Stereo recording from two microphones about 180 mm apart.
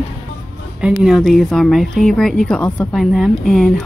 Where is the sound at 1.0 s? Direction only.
Centre (ahead or behind).